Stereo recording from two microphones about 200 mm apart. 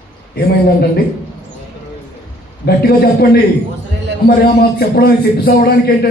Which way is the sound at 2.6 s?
55° left (ahead or behind).